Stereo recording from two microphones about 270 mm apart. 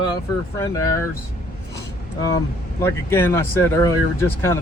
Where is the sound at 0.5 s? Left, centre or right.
Centre.